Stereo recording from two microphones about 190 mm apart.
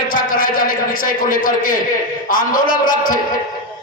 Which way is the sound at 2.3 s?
45° left (ahead or behind).